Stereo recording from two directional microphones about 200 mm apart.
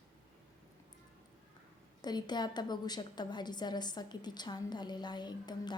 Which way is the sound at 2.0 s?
20° left (ahead or behind).